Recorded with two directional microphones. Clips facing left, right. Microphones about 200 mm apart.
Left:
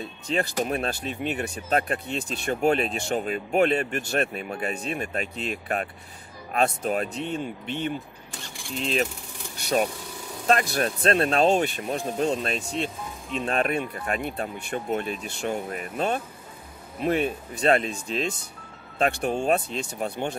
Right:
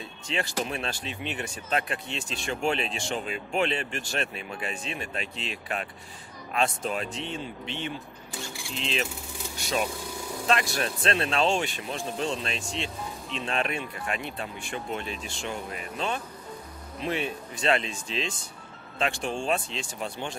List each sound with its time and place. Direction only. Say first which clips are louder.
0.3 s speech: left 5 dB; 40° left (ahead or behind)
6.9 s speech: left 5 dB; 45° left (ahead or behind)
10.4 s speech: left 4 dB; 40° left (ahead or behind)